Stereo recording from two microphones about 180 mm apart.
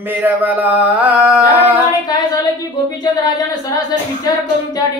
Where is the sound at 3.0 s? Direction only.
20° left (ahead or behind).